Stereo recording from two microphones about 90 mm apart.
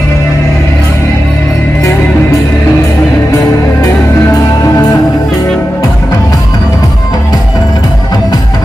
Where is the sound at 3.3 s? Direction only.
35° left (ahead or behind).